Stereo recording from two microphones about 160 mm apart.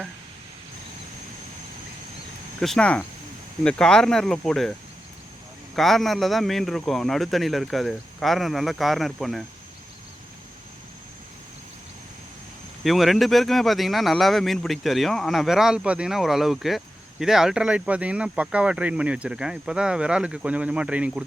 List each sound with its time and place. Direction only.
2.6 s speech: 5° left (ahead or behind)
5.7 s speech: centre (ahead or behind)
12.8 s speech: centre (ahead or behind)